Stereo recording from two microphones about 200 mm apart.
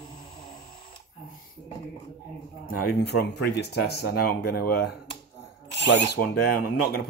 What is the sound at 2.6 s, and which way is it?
Speech, 50° left (ahead or behind).